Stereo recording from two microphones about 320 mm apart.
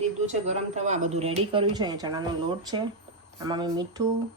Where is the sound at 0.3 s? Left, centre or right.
Right.